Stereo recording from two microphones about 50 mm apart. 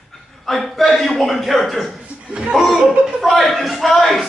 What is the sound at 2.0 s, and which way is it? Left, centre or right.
Chuckle, right.